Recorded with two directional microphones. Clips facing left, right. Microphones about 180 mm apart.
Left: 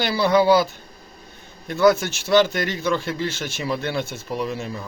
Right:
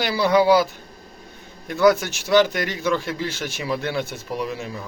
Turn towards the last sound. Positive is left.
turn(degrees=-15)  # may be behind; listen again after turning